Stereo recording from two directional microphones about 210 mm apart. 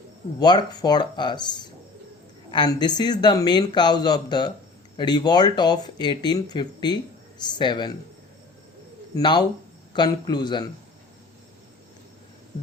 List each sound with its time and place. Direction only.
0.3 s speech: 20° left (ahead or behind)
9.1 s speech: 20° left (ahead or behind)